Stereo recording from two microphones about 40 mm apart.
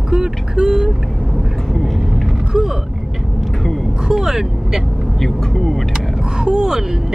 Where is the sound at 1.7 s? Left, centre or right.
Centre.